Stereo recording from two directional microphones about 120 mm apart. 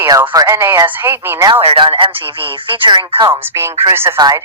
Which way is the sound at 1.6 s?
45° right (ahead or behind).